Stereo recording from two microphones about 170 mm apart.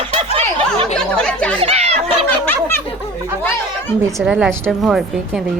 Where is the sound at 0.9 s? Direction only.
5° left (ahead or behind).